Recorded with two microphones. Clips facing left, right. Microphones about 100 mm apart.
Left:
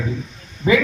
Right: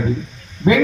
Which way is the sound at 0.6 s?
25° right (ahead or behind).